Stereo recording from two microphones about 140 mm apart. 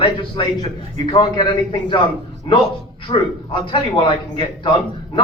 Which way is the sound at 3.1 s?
40° left (ahead or behind).